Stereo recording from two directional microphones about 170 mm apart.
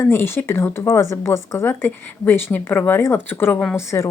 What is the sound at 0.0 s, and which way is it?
Speech, 15° left (ahead or behind).